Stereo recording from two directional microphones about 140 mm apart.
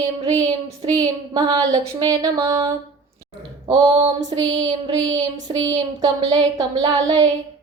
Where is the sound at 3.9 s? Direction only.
35° right (ahead or behind).